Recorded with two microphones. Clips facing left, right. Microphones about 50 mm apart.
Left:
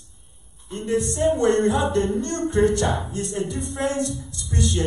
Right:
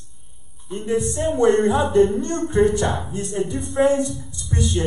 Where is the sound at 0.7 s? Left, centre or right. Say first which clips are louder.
Right 2 dB; centre.